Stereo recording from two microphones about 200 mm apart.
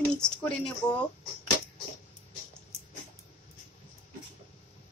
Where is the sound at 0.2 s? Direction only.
5° left (ahead or behind).